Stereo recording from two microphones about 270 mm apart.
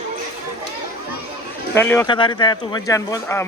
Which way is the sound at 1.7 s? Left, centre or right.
Centre.